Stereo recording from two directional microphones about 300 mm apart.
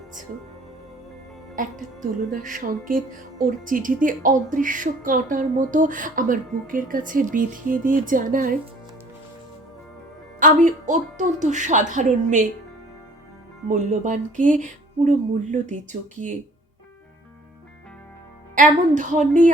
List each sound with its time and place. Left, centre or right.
1.5 s a woman's voice: right
10.4 s a woman's voice: right
13.7 s a woman's voice: right
18.5 s a woman's voice: right